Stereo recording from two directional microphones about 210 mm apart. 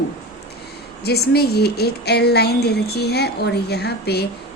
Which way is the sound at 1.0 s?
50° left (ahead or behind).